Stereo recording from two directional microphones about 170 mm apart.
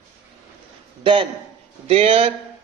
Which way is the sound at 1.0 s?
30° right (ahead or behind).